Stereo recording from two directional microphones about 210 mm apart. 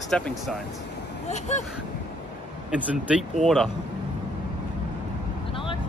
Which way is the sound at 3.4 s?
Centre (ahead or behind).